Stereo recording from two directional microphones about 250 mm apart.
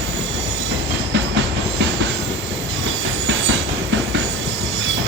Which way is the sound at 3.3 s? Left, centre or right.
Right.